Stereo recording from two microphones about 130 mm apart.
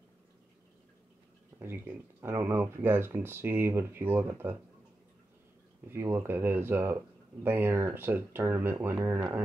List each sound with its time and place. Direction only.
1.6 s speech: 20° right (ahead or behind)
5.9 s speech: 20° right (ahead or behind)